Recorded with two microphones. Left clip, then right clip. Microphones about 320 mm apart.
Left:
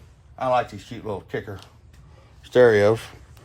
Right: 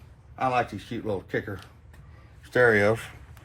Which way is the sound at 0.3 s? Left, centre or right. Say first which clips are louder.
Left 3 dB; centre.